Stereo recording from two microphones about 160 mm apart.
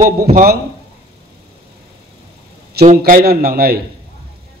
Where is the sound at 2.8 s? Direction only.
60° right (ahead or behind).